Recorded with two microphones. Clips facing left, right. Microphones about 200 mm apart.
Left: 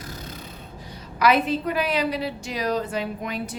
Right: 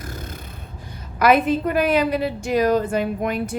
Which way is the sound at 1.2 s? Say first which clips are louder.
Right 4 dB; 50° right (ahead or behind).